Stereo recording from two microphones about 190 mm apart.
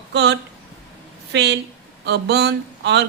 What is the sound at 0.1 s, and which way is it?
A woman's voice, 65° right (ahead or behind).